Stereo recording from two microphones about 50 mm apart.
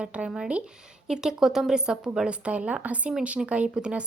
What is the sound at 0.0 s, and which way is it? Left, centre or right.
A woman's voice, right.